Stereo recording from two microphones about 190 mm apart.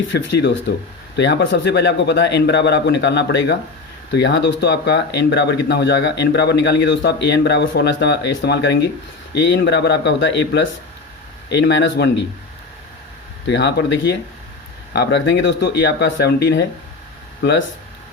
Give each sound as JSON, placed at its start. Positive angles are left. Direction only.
{"t": 0.1, "sound": "speech", "side_deg": 70}
{"t": 13.5, "sound": "speech", "side_deg": 65}